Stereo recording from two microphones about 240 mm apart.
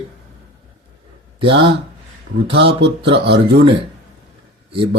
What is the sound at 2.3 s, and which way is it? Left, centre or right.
Speech, right.